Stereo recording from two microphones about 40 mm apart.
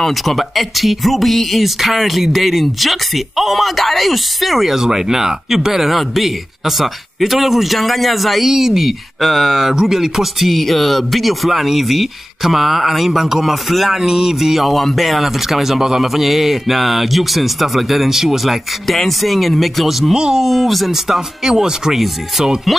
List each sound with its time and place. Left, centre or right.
0.0 s speech: centre
4.7 s speech: centre
20.2 s speech: centre
20.4 s speech: centre
22.7 s speech: centre